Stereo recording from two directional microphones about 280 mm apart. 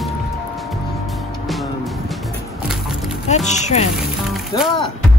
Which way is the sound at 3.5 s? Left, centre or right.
Left.